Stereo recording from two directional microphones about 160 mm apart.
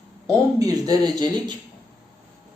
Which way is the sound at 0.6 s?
25° right (ahead or behind).